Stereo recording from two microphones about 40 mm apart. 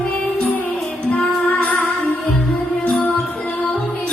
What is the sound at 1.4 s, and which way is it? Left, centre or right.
Music, left.